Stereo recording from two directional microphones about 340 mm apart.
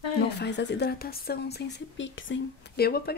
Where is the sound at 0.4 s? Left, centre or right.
Left.